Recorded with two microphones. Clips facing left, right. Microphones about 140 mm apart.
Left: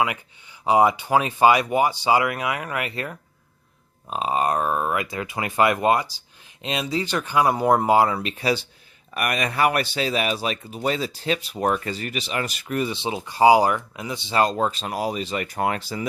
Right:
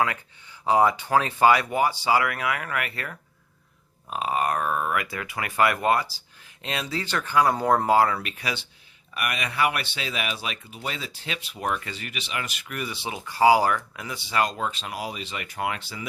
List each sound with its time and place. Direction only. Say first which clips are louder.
0.6 s speech: left 2 dB; 15° left (ahead or behind); by 8.6 s 30° left (ahead or behind)
9.1 s speech: left 4 dB; 45° left (ahead or behind)